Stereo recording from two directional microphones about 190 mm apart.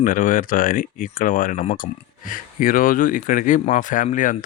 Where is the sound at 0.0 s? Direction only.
45° left (ahead or behind).